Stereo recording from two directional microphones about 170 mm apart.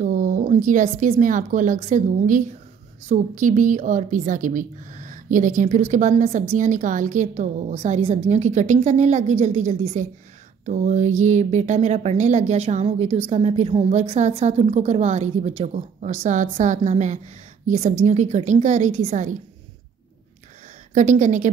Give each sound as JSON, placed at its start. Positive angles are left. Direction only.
{"t": 0.0, "sound": "a woman's voice", "side_deg": -50}
{"t": 20.9, "sound": "a woman's voice", "side_deg": -45}